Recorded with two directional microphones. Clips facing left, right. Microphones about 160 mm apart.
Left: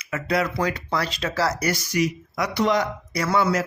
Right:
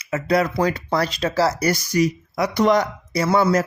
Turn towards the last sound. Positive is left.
turn(degrees=-40)  # may be behind; listen again after turning